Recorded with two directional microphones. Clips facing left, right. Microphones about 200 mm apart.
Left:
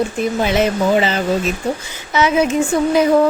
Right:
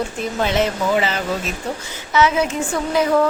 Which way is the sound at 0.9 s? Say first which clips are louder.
Left 4 dB; 25° left (ahead or behind).